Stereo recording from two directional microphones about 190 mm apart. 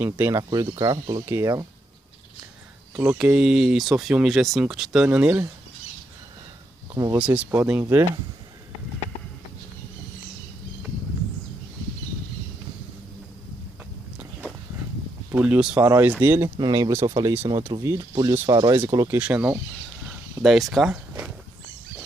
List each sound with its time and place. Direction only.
0.0 s speech: 15° right (ahead or behind)
3.0 s speech: 10° right (ahead or behind)
6.9 s speech: 15° right (ahead or behind)
15.3 s speech: 5° right (ahead or behind)
16.4 s speech: 25° right (ahead or behind); by 19.6 s 10° right (ahead or behind)
20.1 s a sound: 5° right (ahead or behind)